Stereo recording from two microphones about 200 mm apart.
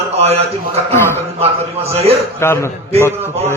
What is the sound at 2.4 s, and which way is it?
Speech, 15° left (ahead or behind).